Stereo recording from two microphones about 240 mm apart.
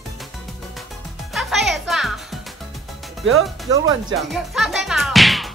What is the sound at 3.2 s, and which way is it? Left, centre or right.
Speech, right.